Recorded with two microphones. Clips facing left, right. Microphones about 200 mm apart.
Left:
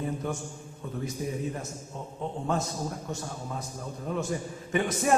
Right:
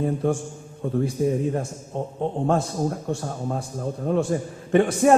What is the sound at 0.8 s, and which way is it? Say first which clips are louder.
A man's voice: right 11 dB; 50° right (ahead or behind).